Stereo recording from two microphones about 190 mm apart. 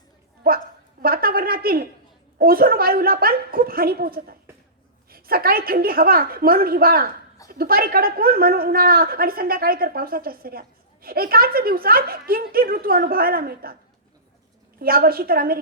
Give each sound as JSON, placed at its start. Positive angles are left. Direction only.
{"t": 0.4, "sound": "a sound", "side_deg": -50}
{"t": 2.4, "sound": "a woman's voice", "side_deg": -50}
{"t": 14.8, "sound": "a woman's voice", "side_deg": -50}